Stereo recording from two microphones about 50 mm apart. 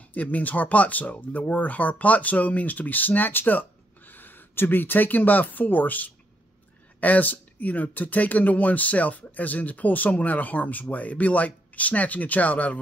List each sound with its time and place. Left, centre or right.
0.1 s speech: left